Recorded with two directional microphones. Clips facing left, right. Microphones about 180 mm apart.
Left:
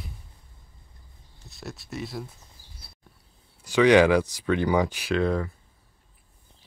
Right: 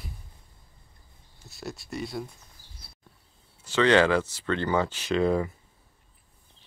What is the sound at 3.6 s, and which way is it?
Speech, 15° left (ahead or behind).